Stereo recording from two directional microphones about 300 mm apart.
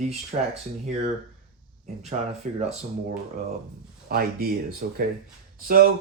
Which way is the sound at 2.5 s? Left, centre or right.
Right.